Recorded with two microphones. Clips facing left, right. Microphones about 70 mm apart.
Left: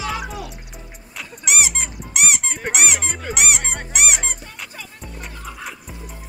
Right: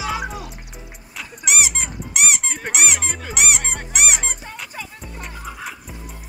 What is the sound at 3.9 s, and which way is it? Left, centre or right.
Music, centre.